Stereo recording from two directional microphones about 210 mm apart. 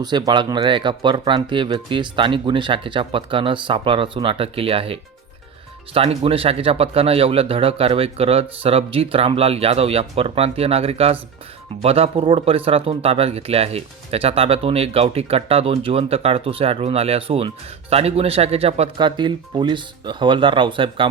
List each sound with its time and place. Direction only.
0.0 s speech: 20° right (ahead or behind)